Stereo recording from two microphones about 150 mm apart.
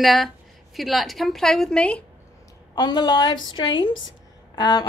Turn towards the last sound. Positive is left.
turn(degrees=25)  # may be behind; listen again after turning